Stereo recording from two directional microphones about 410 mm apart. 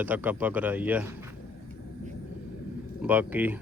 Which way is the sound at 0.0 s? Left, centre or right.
Centre.